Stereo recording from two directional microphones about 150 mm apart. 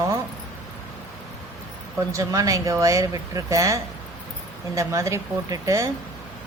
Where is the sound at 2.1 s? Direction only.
20° right (ahead or behind).